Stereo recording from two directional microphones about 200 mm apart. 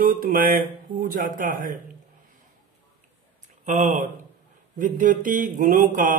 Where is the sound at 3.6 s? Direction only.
35° right (ahead or behind).